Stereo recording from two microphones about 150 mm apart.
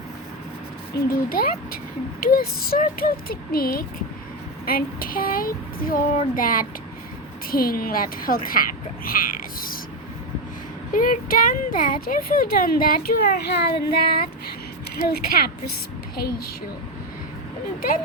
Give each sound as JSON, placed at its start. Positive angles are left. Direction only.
{"t": 0.9, "sound": "speech", "side_deg": 75}
{"t": 10.9, "sound": "speech", "side_deg": 65}